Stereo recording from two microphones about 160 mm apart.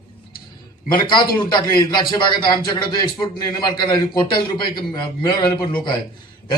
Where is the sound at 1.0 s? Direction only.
30° left (ahead or behind).